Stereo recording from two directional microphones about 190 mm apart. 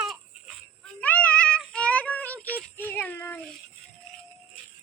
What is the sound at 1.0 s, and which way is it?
Child singing, 10° left (ahead or behind).